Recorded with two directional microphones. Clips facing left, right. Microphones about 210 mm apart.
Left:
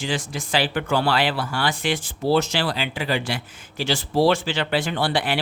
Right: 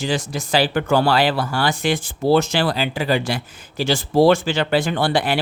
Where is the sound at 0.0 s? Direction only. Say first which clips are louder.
Right 4 dB; 40° right (ahead or behind).